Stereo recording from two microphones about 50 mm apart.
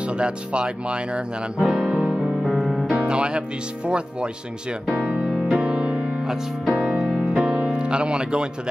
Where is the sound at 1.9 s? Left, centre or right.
Right.